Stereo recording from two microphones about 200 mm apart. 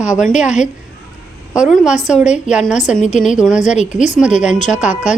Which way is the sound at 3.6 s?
35° left (ahead or behind).